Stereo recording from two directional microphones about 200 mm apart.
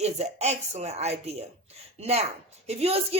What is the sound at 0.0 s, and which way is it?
A woman's voice, 35° right (ahead or behind).